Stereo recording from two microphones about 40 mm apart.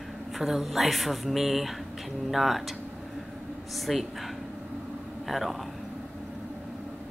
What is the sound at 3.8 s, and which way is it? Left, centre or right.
Speech, centre.